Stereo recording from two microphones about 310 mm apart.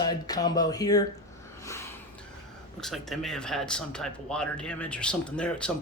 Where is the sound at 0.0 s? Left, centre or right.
Centre.